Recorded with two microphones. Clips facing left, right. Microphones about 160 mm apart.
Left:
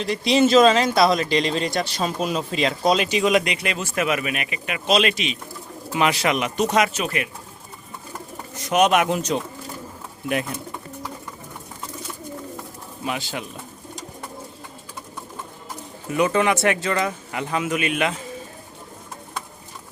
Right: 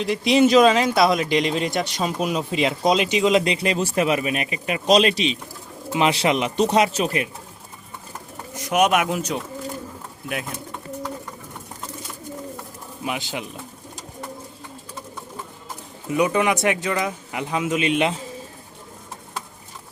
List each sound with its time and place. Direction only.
0.0 s speech: 15° right (ahead or behind); by 7.3 s 30° right (ahead or behind)
8.5 s speech: 10° right (ahead or behind)
13.1 s speech: 15° right (ahead or behind)
16.0 s speech: 15° right (ahead or behind)